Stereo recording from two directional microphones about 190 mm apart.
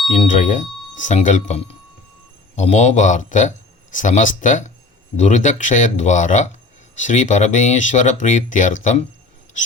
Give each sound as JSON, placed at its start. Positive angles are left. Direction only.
{"t": 0.1, "sound": "speech", "side_deg": 40}